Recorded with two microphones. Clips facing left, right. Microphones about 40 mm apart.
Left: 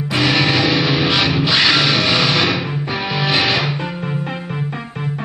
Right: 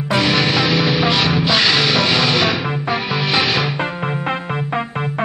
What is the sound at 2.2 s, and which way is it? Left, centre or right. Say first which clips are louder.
Music: even; centre.